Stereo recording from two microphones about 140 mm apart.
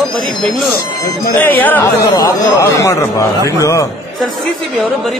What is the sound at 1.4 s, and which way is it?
Speech, 15° left (ahead or behind).